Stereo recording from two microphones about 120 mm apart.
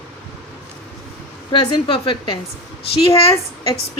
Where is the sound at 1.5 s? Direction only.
40° left (ahead or behind).